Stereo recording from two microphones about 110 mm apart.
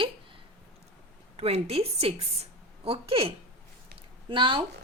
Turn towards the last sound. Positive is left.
turn(degrees=-50)  # may be behind; listen again after turning